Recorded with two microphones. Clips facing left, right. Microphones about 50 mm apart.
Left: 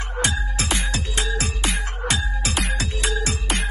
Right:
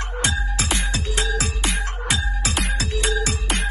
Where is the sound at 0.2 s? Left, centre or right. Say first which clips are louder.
Even; centre.